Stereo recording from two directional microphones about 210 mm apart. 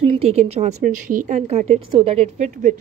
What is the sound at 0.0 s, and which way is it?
A woman's voice, 30° right (ahead or behind).